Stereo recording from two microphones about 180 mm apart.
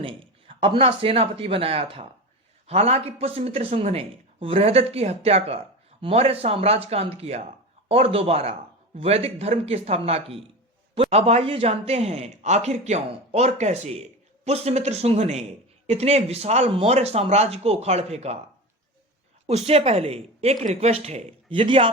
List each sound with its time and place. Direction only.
0.0 s speech: 30° right (ahead or behind)
19.5 s speech: 35° right (ahead or behind)